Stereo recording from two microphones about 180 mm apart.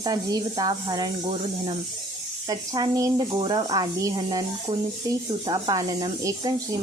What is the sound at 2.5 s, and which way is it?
Speech, 20° right (ahead or behind).